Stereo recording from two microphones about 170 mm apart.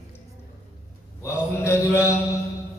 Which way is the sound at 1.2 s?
15° left (ahead or behind).